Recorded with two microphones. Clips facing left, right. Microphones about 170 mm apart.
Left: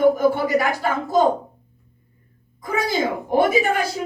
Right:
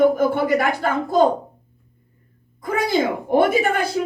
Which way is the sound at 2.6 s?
55° right (ahead or behind).